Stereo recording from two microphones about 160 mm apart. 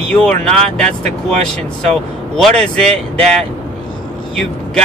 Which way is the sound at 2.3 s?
5° left (ahead or behind).